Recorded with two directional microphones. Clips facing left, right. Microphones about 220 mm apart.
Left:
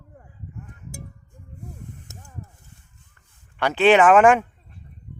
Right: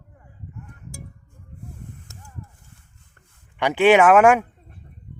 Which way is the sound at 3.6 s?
15° right (ahead or behind).